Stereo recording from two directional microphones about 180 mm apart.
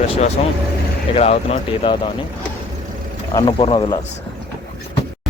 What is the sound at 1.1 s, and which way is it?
Speech, 35° left (ahead or behind).